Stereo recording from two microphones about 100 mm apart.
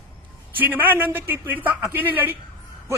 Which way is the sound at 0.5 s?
20° right (ahead or behind).